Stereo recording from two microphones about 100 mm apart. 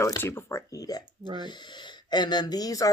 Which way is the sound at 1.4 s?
50° left (ahead or behind).